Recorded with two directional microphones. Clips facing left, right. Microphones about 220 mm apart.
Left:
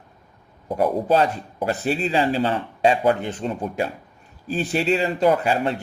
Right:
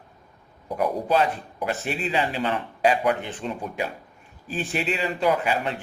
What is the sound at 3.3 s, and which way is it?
A man's voice, 40° left (ahead or behind).